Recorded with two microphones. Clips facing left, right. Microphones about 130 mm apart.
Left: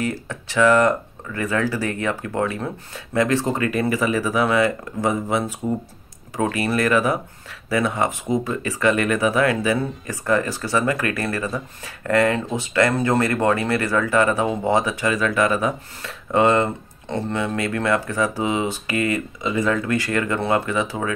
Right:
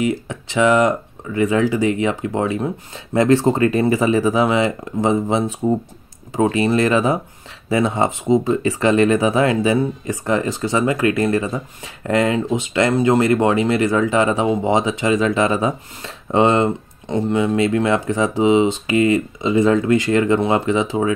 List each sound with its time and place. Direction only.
0.0 s speech: 15° right (ahead or behind)